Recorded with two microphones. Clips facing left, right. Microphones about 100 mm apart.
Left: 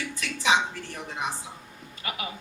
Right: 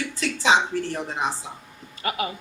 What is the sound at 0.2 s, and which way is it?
Speech, 30° right (ahead or behind).